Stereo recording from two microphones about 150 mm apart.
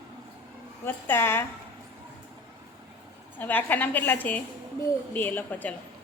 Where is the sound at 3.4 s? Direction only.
10° left (ahead or behind).